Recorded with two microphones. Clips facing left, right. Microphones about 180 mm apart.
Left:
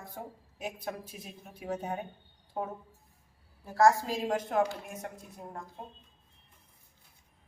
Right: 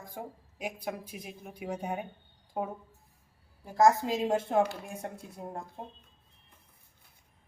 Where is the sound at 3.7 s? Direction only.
20° right (ahead or behind).